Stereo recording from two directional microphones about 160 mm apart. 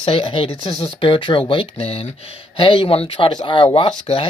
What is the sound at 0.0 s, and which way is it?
Speech, 35° left (ahead or behind).